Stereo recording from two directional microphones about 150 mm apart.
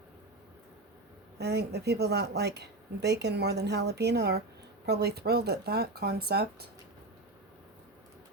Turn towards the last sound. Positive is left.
turn(degrees=-90)